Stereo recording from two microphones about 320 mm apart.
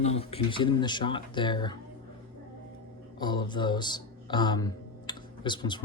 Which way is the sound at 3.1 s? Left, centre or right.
Centre.